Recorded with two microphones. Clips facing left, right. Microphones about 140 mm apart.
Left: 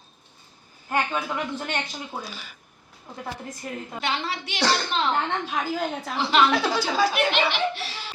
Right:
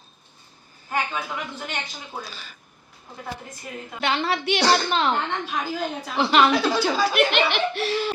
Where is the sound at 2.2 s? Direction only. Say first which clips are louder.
Left 1 dB; 10° left (ahead or behind).